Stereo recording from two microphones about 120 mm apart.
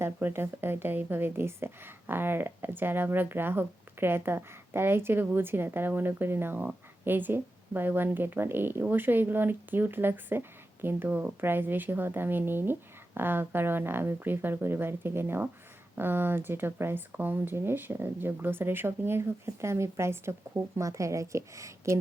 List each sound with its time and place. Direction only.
0.0 s a woman's voice: 20° right (ahead or behind)